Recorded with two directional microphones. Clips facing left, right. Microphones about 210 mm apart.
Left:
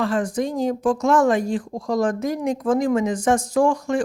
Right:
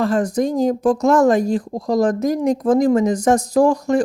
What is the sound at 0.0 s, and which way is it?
Speech, 40° right (ahead or behind).